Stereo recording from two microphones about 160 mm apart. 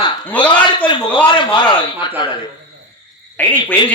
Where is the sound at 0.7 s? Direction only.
30° left (ahead or behind).